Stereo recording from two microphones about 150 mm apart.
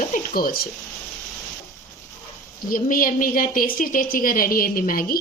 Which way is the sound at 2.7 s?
65° left (ahead or behind).